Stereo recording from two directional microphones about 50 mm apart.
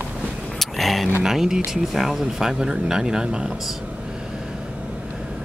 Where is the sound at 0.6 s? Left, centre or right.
Centre.